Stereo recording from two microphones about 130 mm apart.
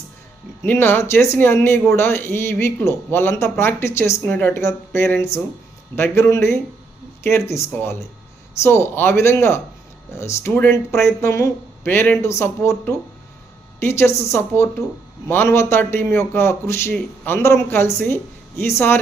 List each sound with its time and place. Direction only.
0.6 s a man's voice: 15° left (ahead or behind)